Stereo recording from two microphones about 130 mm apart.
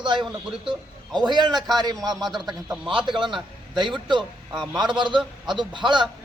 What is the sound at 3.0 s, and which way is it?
Speech, 35° right (ahead or behind).